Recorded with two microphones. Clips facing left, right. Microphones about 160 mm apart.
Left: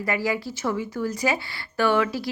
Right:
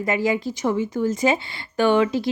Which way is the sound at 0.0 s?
20° right (ahead or behind).